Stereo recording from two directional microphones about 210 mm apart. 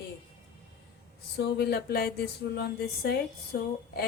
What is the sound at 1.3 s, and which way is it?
A woman's voice, 50° left (ahead or behind).